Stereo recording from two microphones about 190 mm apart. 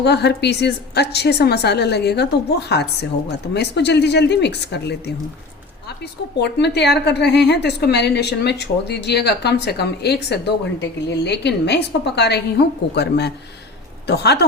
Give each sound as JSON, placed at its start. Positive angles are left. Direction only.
{"t": 0.0, "sound": "a woman's voice", "side_deg": 60}
{"t": 6.4, "sound": "a woman's voice", "side_deg": 60}